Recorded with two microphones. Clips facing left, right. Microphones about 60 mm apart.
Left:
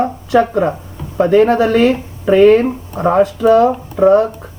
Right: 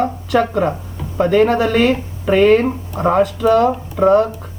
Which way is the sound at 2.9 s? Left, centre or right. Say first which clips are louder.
Left 2 dB; left.